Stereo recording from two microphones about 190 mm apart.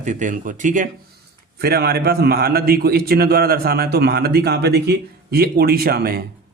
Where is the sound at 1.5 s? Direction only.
55° right (ahead or behind).